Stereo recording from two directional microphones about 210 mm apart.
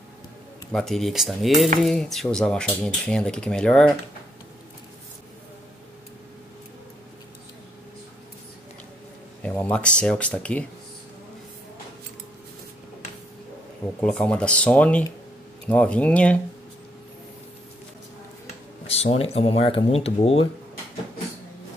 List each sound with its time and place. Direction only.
0.7 s speech: centre (ahead or behind)
9.4 s speech: 5° left (ahead or behind)
14.0 s speech: 5° left (ahead or behind)
18.9 s speech: 30° left (ahead or behind)